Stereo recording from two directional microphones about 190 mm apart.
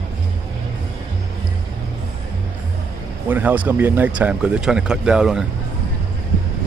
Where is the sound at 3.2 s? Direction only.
10° right (ahead or behind).